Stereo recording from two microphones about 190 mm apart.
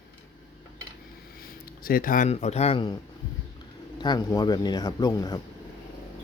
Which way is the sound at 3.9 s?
20° left (ahead or behind).